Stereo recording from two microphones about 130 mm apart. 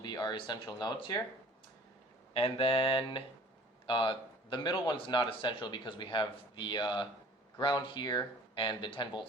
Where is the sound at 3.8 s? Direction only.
40° left (ahead or behind).